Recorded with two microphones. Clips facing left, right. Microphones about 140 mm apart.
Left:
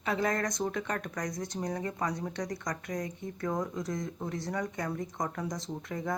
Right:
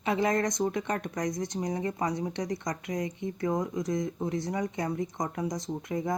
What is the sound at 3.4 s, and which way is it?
Speech, 15° right (ahead or behind).